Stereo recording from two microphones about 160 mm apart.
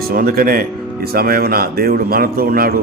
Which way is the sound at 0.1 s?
65° right (ahead or behind).